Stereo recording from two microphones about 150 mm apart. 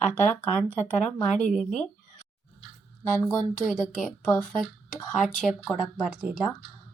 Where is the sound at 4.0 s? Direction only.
5° left (ahead or behind).